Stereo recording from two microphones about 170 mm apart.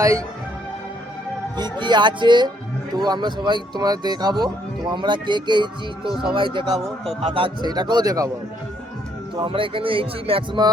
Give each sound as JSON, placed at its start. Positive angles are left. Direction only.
{"t": 0.0, "sound": "speech", "side_deg": -20}
{"t": 1.5, "sound": "speech", "side_deg": -25}
{"t": 6.7, "sound": "speech", "side_deg": 0}
{"t": 7.2, "sound": "speech", "side_deg": -30}
{"t": 9.3, "sound": "speech", "side_deg": -30}